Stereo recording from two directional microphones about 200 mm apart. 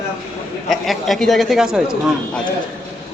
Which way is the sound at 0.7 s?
Centre (ahead or behind).